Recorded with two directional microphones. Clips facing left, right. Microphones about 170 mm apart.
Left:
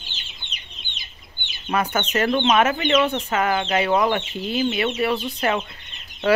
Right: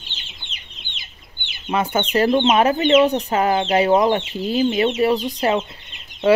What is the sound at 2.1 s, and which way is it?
Speech, 30° right (ahead or behind).